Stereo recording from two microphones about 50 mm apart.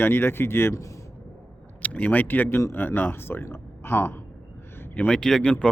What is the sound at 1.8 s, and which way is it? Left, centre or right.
Speech, left.